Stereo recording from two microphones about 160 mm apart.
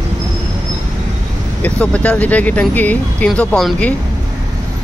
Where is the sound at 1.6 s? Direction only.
10° left (ahead or behind).